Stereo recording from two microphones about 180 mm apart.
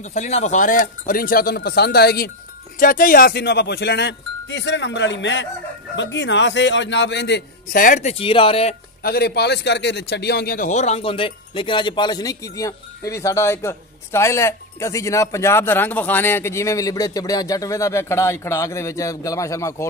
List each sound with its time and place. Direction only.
0.0 s speech: 40° left (ahead or behind); by 2.3 s 60° left (ahead or behind)
2.8 s a man's voice: 50° left (ahead or behind); by 7.8 s 70° left (ahead or behind)
7.8 s speech: 40° left (ahead or behind)
9.0 s a man's voice: 60° left (ahead or behind); by 19.9 s 15° left (ahead or behind)